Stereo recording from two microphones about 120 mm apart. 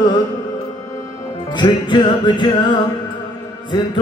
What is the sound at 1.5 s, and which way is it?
Music, 40° left (ahead or behind).